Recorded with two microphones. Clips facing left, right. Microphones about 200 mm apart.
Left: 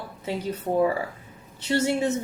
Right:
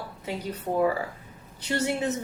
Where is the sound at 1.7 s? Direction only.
25° left (ahead or behind).